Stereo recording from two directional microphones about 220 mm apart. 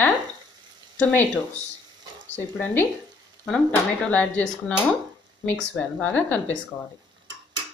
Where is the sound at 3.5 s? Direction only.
5° left (ahead or behind).